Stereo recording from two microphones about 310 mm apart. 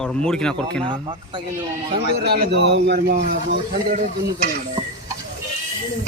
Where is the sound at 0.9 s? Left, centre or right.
Centre.